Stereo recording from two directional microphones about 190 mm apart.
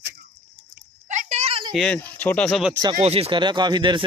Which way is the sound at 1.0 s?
40° right (ahead or behind).